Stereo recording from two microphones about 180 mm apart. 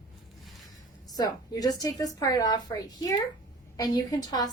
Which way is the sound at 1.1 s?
20° left (ahead or behind).